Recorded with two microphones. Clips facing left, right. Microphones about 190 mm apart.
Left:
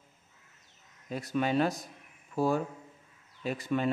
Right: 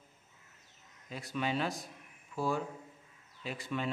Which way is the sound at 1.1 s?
45° left (ahead or behind).